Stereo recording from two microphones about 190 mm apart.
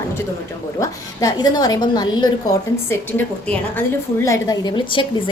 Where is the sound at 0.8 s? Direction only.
20° left (ahead or behind).